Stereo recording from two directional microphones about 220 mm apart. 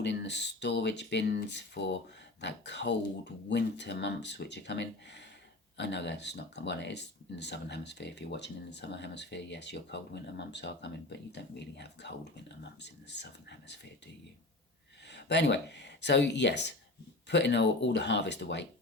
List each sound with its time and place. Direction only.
0.0 s speech: 50° left (ahead or behind)
15.1 s speech: 50° left (ahead or behind)